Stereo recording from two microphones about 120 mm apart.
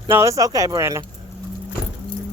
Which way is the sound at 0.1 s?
25° right (ahead or behind).